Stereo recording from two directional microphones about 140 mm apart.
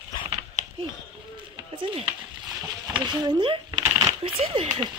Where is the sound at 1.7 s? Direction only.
40° right (ahead or behind).